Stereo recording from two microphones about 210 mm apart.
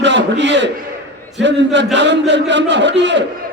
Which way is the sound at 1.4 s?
55° right (ahead or behind).